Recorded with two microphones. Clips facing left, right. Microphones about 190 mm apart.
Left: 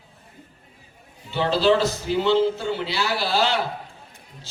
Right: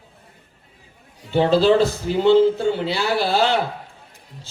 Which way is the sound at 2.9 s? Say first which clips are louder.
Right 4 dB; 55° right (ahead or behind).